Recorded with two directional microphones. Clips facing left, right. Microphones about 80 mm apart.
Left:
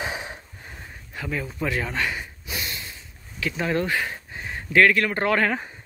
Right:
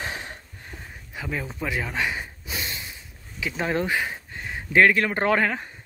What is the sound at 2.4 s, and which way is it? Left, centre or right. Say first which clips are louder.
Snort: even; right.